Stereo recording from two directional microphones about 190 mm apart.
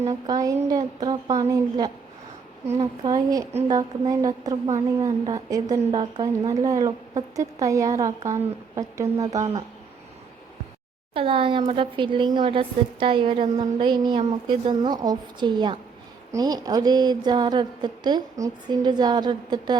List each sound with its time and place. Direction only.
0.1 s a woman's voice: 20° right (ahead or behind)
3.0 s a woman's voice: 20° right (ahead or behind)
11.1 s a woman's voice: 30° right (ahead or behind)